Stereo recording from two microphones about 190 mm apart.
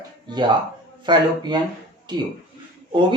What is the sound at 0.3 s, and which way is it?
Speech, 25° right (ahead or behind).